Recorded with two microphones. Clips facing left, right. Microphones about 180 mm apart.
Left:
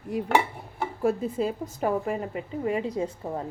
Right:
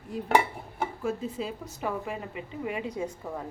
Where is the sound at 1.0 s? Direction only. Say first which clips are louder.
Left 9 dB; 55° left (ahead or behind); by 3.5 s 30° left (ahead or behind).